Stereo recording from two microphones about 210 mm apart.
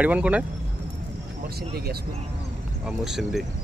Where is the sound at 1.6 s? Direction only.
50° right (ahead or behind).